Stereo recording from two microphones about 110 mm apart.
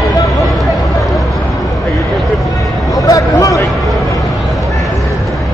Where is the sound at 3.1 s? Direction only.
30° left (ahead or behind).